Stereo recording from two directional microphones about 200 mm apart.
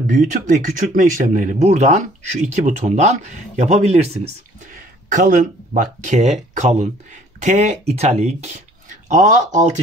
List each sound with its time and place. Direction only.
0.1 s speech: 40° right (ahead or behind)